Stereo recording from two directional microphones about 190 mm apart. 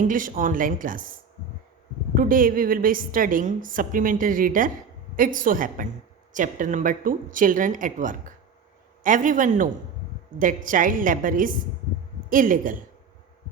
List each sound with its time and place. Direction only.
0.0 s a woman's voice: 45° right (ahead or behind)
2.1 s a woman's voice: 45° right (ahead or behind)